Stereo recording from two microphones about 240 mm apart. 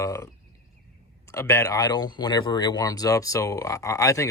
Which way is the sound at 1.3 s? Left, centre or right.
Centre.